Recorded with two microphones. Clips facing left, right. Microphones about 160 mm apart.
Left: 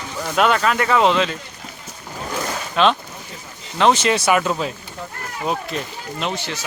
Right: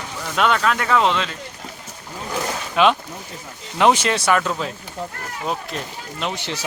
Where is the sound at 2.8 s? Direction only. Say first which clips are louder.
Even; 10° right (ahead or behind).